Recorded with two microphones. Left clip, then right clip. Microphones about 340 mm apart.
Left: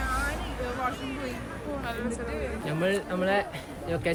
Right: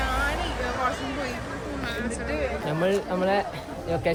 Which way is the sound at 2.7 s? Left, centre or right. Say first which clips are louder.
Right 2 dB; centre.